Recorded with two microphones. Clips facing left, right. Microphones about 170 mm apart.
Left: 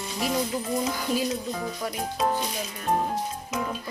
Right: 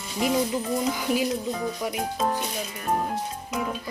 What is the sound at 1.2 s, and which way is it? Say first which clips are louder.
Speech: right 2 dB; centre (ahead or behind).